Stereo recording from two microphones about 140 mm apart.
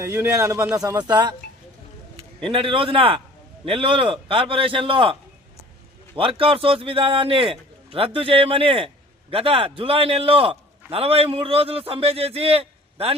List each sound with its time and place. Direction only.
0.0 s a man's voice: 20° right (ahead or behind); by 5.1 s 40° right (ahead or behind)
6.1 s a man's voice: 40° right (ahead or behind)